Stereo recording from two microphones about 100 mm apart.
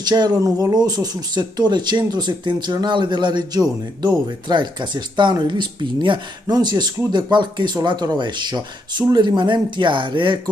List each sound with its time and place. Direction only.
0.0 s speech: 45° right (ahead or behind)